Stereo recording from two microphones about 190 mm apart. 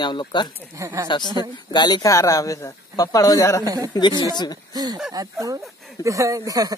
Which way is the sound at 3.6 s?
20° right (ahead or behind).